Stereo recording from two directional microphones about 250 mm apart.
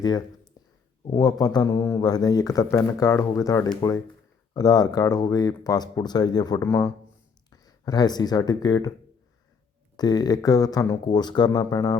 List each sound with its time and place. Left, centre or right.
0.0 s speech: centre
0.6 s a sound: centre
1.0 s speech: centre
10.0 s speech: centre